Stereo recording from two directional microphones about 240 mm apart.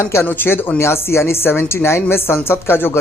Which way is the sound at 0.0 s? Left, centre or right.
Centre.